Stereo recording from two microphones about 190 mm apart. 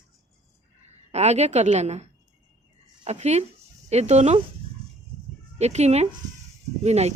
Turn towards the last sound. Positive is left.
turn(degrees=-35)  # may be behind; listen again after turning